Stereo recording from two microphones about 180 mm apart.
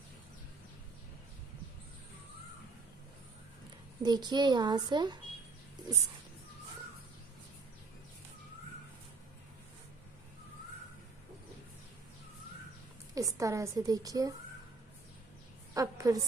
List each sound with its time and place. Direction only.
4.0 s a child's voice: 25° right (ahead or behind)
13.1 s a child's voice: 20° right (ahead or behind)
15.7 s a woman's voice: 20° right (ahead or behind)